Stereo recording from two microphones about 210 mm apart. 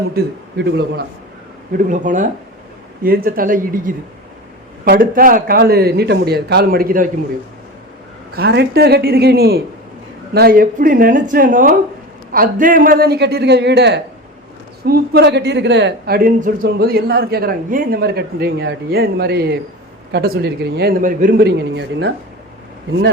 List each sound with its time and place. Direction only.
0.2 s speech: 50° right (ahead or behind)
1.9 s speech: 35° right (ahead or behind)
8.4 s speech: 50° right (ahead or behind)
21.8 s speech: 60° right (ahead or behind)